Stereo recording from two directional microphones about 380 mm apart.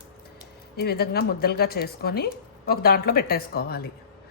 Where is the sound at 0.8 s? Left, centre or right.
Left.